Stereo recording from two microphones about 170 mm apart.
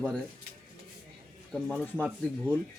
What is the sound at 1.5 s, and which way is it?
Speech, 5° left (ahead or behind).